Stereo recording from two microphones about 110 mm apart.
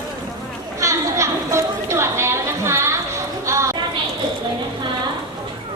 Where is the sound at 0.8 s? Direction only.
30° right (ahead or behind).